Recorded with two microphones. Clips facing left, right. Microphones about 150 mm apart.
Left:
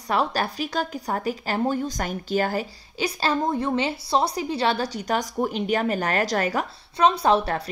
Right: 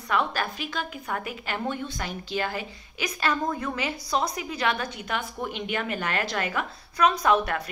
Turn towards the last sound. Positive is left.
turn(degrees=30)  # may be behind; listen again after turning